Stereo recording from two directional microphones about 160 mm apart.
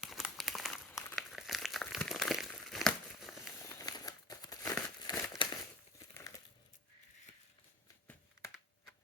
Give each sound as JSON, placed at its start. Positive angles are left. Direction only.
{"t": 0.0, "sound": "crumpling", "side_deg": 0}
{"t": 3.4, "sound": "crumpling", "side_deg": 20}